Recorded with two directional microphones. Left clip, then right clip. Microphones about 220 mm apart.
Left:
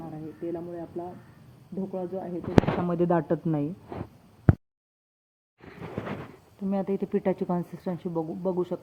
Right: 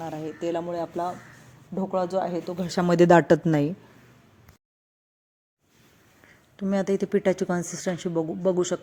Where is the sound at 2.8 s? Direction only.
45° right (ahead or behind).